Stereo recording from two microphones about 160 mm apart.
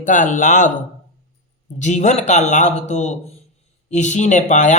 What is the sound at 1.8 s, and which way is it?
Music, 45° left (ahead or behind).